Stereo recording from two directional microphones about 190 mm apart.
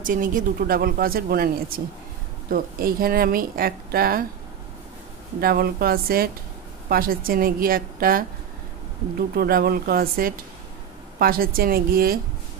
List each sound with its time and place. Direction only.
0.0 s speech: 45° right (ahead or behind)
5.4 s speech: 55° right (ahead or behind)
9.3 s speech: 50° right (ahead or behind)